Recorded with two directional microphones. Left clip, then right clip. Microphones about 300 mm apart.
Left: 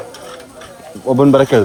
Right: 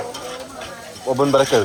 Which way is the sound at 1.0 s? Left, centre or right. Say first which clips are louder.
Left 5 dB; left.